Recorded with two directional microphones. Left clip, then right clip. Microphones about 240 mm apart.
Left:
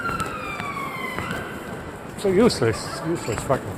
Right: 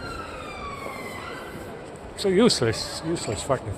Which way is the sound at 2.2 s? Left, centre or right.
Right.